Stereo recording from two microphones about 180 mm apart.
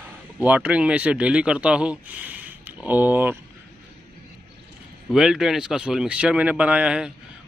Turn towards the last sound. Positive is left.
turn(degrees=-5)  # may be behind; listen again after turning